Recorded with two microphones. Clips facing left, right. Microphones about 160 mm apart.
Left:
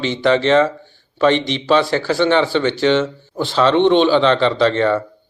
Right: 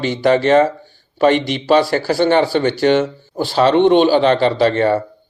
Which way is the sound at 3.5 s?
45° right (ahead or behind).